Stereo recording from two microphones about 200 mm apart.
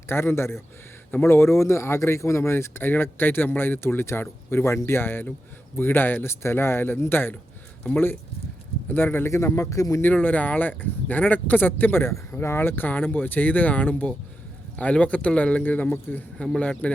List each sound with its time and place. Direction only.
0.1 s speech: 10° left (ahead or behind)